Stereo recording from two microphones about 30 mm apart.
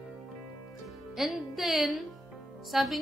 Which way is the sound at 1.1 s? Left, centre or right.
Centre.